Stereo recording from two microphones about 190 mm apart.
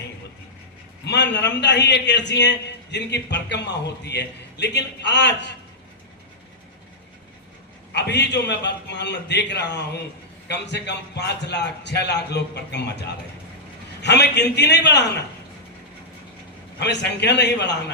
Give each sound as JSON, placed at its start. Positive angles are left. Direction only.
{"t": 1.0, "sound": "a man's voice", "side_deg": 65}
{"t": 7.9, "sound": "a man's voice", "side_deg": 65}
{"t": 16.8, "sound": "a man's voice", "side_deg": 65}